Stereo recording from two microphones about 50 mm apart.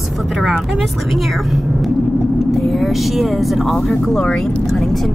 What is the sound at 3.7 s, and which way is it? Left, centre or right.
Speech, centre.